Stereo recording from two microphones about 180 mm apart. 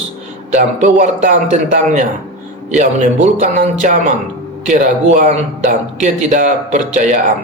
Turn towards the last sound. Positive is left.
turn(degrees=-40)  # may be behind; listen again after turning